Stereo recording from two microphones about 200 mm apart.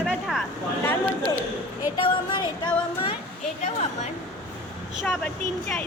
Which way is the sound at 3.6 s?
35° left (ahead or behind).